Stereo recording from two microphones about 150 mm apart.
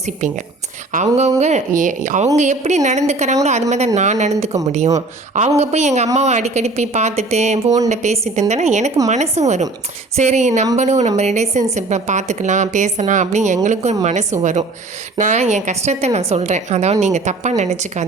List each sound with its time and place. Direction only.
0.9 s a woman's voice: 50° right (ahead or behind)